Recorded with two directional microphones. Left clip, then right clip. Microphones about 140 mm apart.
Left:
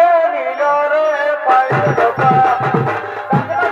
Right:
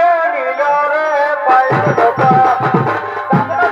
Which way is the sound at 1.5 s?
20° right (ahead or behind).